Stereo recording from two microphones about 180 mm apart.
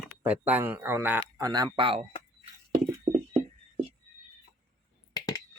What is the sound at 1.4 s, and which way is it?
Speech, 20° right (ahead or behind).